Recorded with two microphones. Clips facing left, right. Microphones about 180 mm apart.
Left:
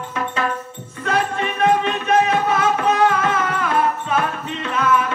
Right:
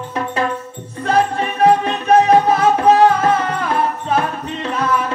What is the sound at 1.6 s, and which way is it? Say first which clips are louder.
Music: right 4 dB; 35° right (ahead or behind).